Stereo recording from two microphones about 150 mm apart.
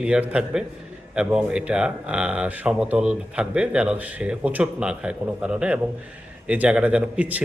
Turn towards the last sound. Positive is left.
turn(degrees=-10)  # may be behind; listen again after turning